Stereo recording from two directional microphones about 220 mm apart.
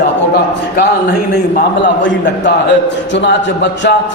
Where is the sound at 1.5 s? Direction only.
50° left (ahead or behind).